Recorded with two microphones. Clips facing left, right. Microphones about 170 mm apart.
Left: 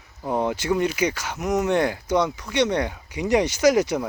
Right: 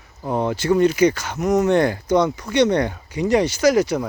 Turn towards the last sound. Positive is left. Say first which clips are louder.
# right 2 dB
turn(degrees=20)  # may be behind; listen again after turning